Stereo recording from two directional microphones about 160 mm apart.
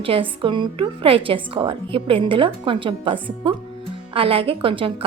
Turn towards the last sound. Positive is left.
turn(degrees=-35)  # may be behind; listen again after turning